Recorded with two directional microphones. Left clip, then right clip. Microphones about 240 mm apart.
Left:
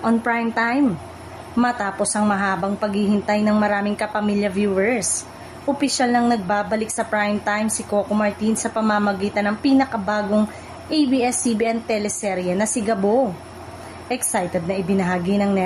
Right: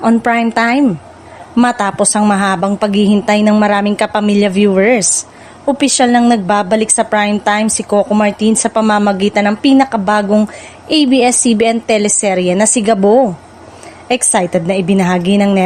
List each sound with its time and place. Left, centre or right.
0.0 s a woman's voice: right